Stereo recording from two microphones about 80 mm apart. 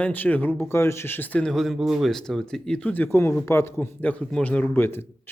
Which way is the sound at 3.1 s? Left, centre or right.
Left.